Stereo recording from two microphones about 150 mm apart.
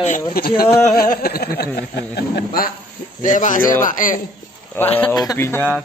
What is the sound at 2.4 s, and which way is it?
Speech, 75° left (ahead or behind).